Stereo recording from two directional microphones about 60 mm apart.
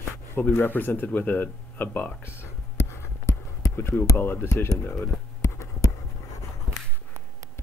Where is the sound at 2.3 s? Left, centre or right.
Left.